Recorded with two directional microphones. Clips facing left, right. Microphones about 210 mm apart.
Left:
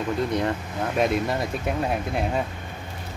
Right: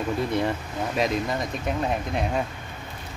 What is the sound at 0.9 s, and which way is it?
Speech, 5° left (ahead or behind).